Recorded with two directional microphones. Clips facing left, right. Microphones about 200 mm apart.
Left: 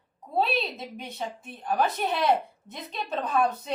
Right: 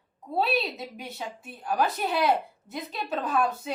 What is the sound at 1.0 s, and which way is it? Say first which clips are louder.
A woman's voice: left 2 dB; 5° right (ahead or behind).